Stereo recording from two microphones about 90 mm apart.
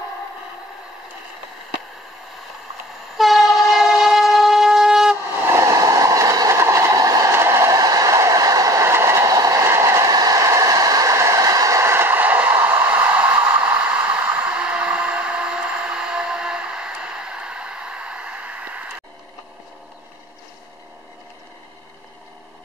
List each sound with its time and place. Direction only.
3.2 s train: centre (ahead or behind)
5.4 s train: 30° right (ahead or behind)
7.3 s vehicle: 30° right (ahead or behind)
7.7 s train: 45° right (ahead or behind)
10.1 s train: 40° right (ahead or behind); by 18.9 s 15° right (ahead or behind)